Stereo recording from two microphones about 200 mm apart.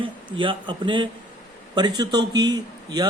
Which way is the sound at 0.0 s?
25° right (ahead or behind).